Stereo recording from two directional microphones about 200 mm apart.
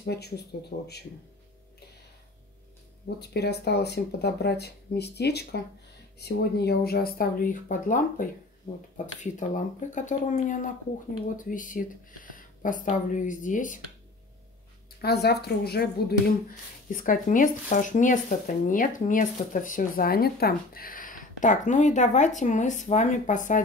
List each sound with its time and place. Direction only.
0.0 s speech: 55° left (ahead or behind)
3.2 s speech: 55° left (ahead or behind); by 13.7 s 40° left (ahead or behind)
15.0 s speech: 55° left (ahead or behind)